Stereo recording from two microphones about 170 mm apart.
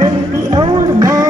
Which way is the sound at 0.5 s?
25° right (ahead or behind).